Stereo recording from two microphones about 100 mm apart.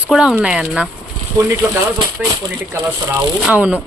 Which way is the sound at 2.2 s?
10° right (ahead or behind).